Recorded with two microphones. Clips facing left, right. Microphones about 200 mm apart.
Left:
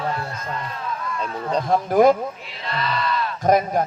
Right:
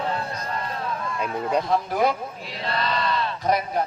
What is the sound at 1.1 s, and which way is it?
Speech, 10° right (ahead or behind).